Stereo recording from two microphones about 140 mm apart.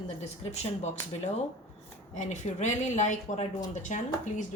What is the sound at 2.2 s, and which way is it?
Speech, 60° left (ahead or behind).